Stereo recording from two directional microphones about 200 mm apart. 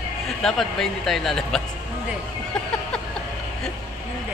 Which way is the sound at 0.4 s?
Centre (ahead or behind).